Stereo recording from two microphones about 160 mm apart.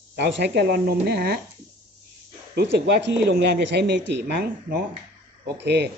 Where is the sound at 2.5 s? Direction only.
90° right.